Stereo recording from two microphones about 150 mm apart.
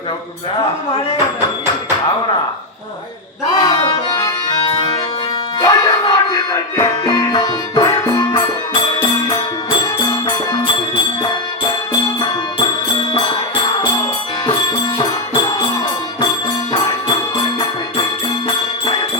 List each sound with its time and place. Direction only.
3.6 s music: 30° left (ahead or behind)
5.5 s music: 30° left (ahead or behind)
10.1 s music: 30° left (ahead or behind)